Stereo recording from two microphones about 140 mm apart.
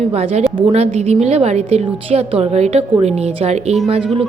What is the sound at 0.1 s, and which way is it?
A woman's voice, 50° right (ahead or behind).